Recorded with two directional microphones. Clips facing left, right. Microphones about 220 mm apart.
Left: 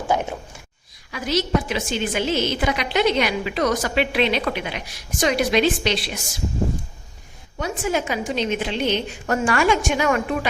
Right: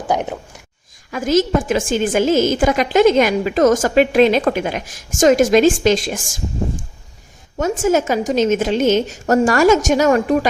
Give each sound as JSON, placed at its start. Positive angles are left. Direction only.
{"t": 0.1, "sound": "speech", "side_deg": -15}
{"t": 1.1, "sound": "a woman's voice", "side_deg": -45}
{"t": 7.6, "sound": "a woman's voice", "side_deg": -45}